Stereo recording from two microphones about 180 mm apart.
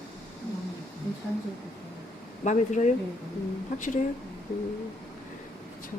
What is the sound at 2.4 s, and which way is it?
Speech, 45° left (ahead or behind).